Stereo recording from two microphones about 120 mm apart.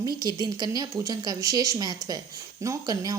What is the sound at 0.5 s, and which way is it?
Speech, 35° right (ahead or behind).